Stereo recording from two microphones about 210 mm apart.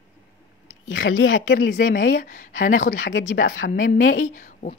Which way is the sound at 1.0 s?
65° left (ahead or behind).